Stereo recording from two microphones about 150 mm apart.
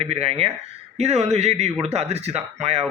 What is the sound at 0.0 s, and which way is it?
Speech, 45° right (ahead or behind).